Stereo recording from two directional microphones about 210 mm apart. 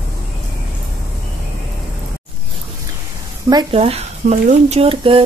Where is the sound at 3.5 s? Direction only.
20° right (ahead or behind).